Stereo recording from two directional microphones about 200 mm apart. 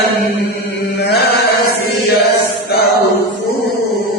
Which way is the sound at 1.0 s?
55° left (ahead or behind).